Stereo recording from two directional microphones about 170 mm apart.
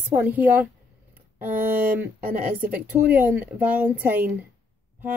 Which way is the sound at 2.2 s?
55° right (ahead or behind).